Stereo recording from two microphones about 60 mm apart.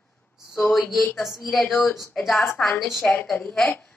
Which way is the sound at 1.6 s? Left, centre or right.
Left.